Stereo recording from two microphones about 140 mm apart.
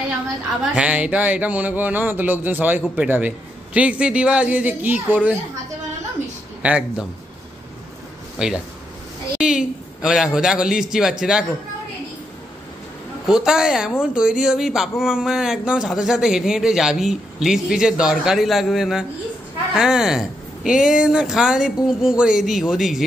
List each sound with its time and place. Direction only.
0.7 s a man's voice: 10° right (ahead or behind)
6.6 s a man's voice: 10° right (ahead or behind)
8.4 s speech: 5° right (ahead or behind)
13.3 s speech: 5° right (ahead or behind)